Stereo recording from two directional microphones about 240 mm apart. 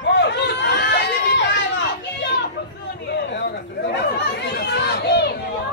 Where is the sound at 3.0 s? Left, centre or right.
Left.